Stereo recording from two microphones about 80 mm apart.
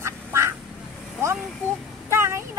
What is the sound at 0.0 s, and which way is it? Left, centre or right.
Quack, right.